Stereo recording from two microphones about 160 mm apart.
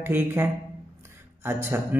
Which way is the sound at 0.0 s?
15° right (ahead or behind).